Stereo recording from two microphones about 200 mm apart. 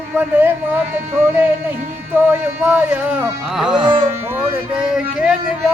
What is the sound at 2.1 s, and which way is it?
Music, 10° right (ahead or behind).